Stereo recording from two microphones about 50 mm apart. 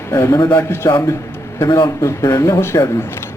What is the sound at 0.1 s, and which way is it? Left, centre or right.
A man's voice, left.